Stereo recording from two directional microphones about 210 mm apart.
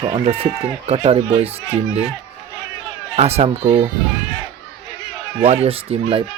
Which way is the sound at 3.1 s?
30° right (ahead or behind).